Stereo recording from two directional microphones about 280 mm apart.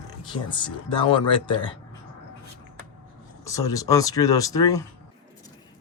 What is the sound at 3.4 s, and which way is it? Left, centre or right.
Speech, centre.